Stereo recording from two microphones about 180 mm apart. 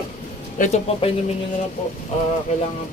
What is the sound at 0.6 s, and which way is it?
Speech, 35° left (ahead or behind).